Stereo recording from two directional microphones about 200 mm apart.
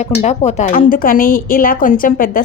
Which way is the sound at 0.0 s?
35° left (ahead or behind).